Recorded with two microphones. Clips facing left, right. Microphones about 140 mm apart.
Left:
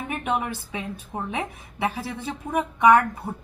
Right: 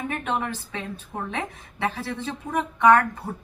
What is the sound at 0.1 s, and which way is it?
A woman's voice, 10° left (ahead or behind).